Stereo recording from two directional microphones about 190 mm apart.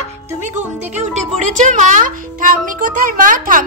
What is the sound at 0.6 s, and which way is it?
A woman's voice, 40° right (ahead or behind).